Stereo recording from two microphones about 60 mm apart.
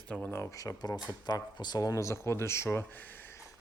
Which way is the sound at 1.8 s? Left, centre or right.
Left.